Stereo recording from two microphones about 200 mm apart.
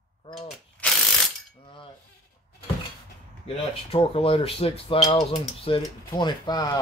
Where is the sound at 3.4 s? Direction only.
25° left (ahead or behind).